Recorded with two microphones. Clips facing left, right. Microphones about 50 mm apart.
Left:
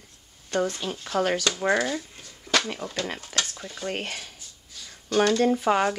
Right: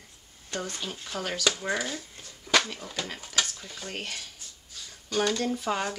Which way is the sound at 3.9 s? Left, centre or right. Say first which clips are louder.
Left 6 dB; left.